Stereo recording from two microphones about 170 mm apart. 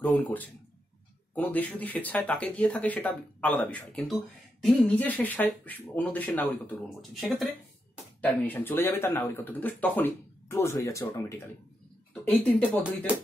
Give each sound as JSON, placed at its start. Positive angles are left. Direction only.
{"t": 0.0, "sound": "speech", "side_deg": 10}
{"t": 8.2, "sound": "speech", "side_deg": 10}
{"t": 13.1, "sound": "speech", "side_deg": -5}